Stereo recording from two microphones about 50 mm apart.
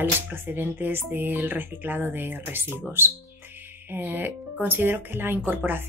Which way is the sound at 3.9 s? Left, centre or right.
Right.